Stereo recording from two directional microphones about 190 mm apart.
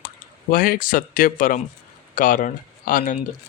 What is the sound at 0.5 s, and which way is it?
Speech, 50° left (ahead or behind).